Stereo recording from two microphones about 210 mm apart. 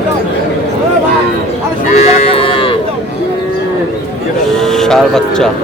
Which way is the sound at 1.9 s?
35° left (ahead or behind).